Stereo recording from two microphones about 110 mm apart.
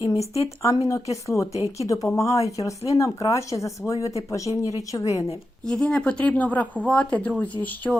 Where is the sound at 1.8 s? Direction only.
30° left (ahead or behind).